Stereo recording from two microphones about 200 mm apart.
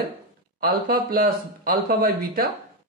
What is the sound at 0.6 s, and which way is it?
Speech, 45° right (ahead or behind).